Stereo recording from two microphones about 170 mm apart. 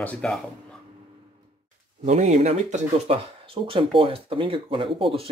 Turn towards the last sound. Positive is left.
turn(degrees=-30)  # may be behind; listen again after turning